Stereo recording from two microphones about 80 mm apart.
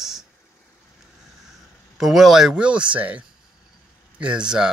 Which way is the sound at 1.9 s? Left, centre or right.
Centre.